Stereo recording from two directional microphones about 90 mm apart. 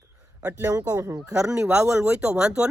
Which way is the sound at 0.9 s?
35° right (ahead or behind).